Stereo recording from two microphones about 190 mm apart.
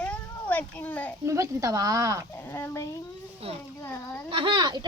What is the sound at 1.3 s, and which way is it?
Speech, 15° right (ahead or behind).